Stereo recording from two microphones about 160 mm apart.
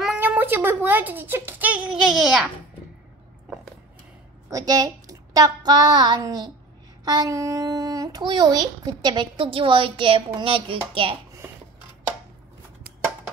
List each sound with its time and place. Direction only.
0.2 s speech: 10° right (ahead or behind)
4.5 s a woman's voice: 20° right (ahead or behind)